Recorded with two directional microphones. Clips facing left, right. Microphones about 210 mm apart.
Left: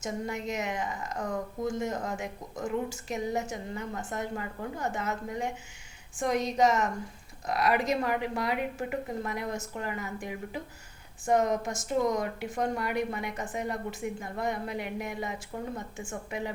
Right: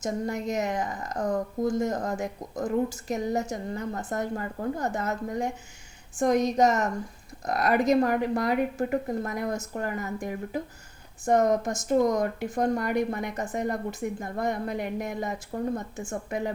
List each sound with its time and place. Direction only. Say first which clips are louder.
0.0 s a woman's voice: right 4 dB; 40° right (ahead or behind)